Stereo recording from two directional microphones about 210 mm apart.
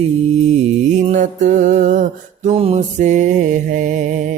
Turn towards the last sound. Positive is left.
turn(degrees=-35)  # may be behind; listen again after turning